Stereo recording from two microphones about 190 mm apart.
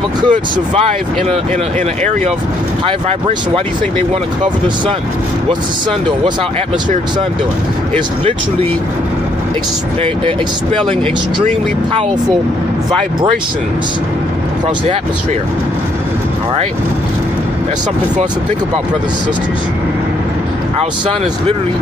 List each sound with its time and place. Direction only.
0.3 s speech: 30° right (ahead or behind)
3.1 s speech: 35° right (ahead or behind)